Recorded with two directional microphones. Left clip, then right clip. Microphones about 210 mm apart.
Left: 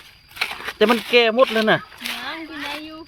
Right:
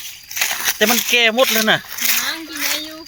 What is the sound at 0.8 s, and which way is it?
Speech, 10° left (ahead or behind).